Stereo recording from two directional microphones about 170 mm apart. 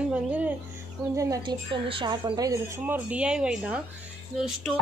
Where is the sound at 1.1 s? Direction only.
20° right (ahead or behind).